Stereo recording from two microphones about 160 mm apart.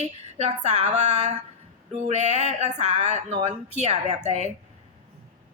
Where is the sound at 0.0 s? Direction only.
40° right (ahead or behind).